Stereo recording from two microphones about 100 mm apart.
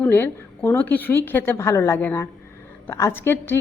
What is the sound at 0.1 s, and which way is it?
A woman's voice, 25° left (ahead or behind).